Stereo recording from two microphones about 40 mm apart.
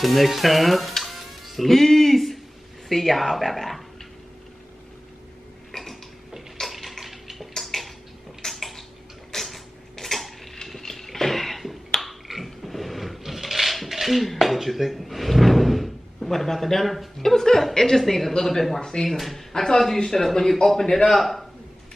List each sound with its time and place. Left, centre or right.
0.0 s speech: centre
5.7 s a sound: centre
17.7 s a woman's voice: centre
19.0 s a woman's voice: centre